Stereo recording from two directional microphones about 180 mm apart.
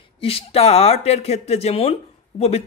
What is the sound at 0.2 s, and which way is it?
Speech, 35° left (ahead or behind).